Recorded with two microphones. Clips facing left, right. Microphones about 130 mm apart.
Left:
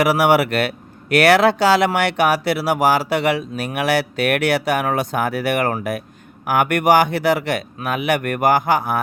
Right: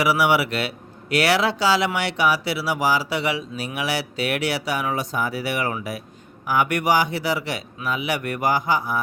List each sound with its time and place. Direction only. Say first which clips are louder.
0.0 s speech: left 4 dB; 50° left (ahead or behind)